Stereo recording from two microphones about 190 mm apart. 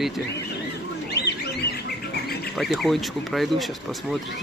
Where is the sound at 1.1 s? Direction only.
60° left (ahead or behind).